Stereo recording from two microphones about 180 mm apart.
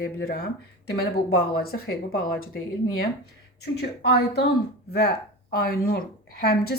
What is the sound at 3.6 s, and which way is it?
Speech, 65° left (ahead or behind).